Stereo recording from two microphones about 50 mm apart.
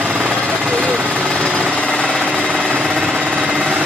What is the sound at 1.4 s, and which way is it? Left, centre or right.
Jackhammer, right.